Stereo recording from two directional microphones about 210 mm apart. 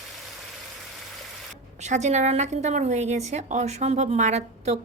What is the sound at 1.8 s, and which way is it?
A woman's voice, 35° right (ahead or behind).